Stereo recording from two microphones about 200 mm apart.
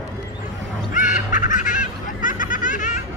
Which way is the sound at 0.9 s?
40° left (ahead or behind).